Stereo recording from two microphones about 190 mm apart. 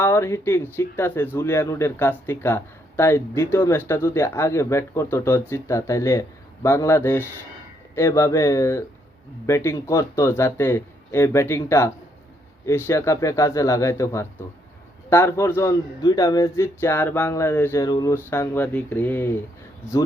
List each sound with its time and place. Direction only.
0.0 s speech: 15° left (ahead or behind)